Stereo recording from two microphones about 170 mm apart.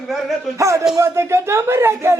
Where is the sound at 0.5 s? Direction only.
15° right (ahead or behind).